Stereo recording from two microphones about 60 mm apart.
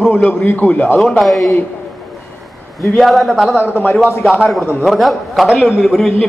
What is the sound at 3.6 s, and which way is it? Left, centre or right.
Speech, left.